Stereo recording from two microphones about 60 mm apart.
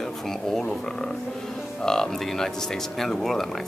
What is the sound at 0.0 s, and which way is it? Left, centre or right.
Speech, centre.